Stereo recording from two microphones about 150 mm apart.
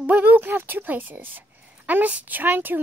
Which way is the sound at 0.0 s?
10° right (ahead or behind).